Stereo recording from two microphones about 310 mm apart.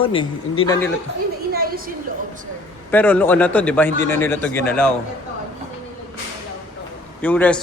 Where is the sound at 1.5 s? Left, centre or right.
Right.